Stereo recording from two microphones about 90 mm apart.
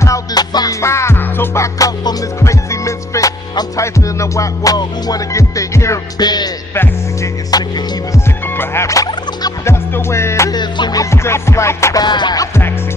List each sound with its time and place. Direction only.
0.0 s music: 40° left (ahead or behind)
0.7 s music: 30° left (ahead or behind)
6.1 s music: 50° left (ahead or behind)
7.5 s music: 45° left (ahead or behind)
8.5 s music: 30° left (ahead or behind)
9.7 s music: 30° left (ahead or behind)
10.5 s music: 55° left (ahead or behind)
11.0 s music: 30° left (ahead or behind)
12.0 s music: 55° left (ahead or behind)